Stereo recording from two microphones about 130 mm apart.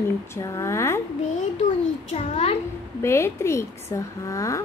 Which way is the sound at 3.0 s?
20° left (ahead or behind).